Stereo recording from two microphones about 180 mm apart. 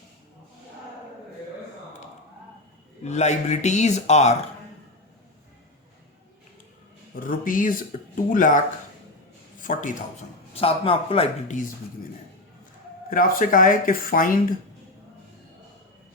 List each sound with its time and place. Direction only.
3.0 s speech: 40° left (ahead or behind)
7.2 s a man's voice: 50° left (ahead or behind)
10.5 s speech: 30° left (ahead or behind)
13.1 s speech: 50° left (ahead or behind)